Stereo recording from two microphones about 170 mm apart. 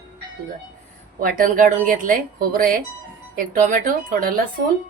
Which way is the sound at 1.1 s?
55° right (ahead or behind).